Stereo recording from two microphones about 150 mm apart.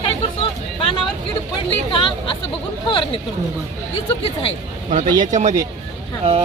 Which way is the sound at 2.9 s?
35° left (ahead or behind).